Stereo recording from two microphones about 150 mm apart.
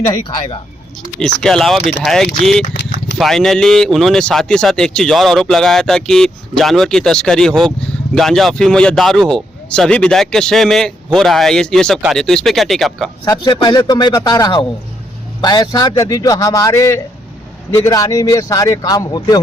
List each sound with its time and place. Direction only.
1.2 s speech: 5° left (ahead or behind)
13.2 s a man's voice: 30° left (ahead or behind)